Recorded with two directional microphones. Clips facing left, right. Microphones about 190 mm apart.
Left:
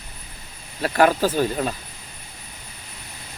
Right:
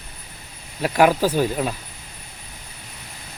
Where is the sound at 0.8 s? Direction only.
10° right (ahead or behind).